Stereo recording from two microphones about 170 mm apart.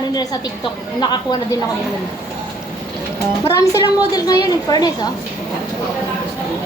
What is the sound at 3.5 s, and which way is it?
A woman's voice, 20° left (ahead or behind).